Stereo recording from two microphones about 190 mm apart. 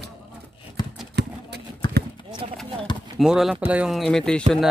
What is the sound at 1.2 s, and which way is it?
Horse, 60° right (ahead or behind).